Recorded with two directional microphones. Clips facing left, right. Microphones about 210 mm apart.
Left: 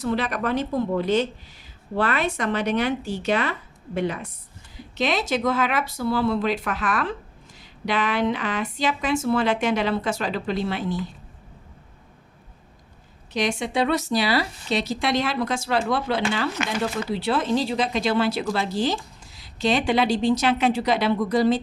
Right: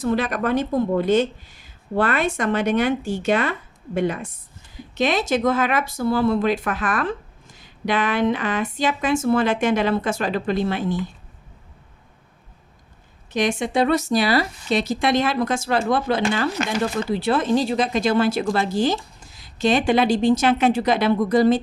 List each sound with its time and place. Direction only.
0.0 s speech: 45° right (ahead or behind)
13.3 s speech: 50° right (ahead or behind)